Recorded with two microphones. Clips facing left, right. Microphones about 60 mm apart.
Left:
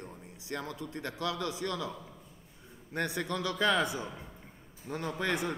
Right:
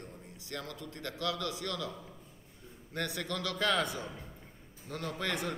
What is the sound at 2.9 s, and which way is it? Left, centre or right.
A man's voice, left.